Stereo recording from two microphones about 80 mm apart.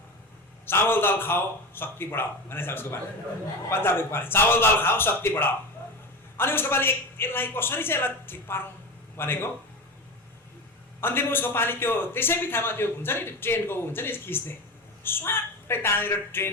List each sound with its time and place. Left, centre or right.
0.6 s a man's voice: left
11.0 s a man's voice: left